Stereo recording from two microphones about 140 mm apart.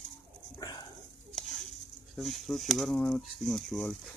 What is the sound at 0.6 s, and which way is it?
Dog, 25° left (ahead or behind).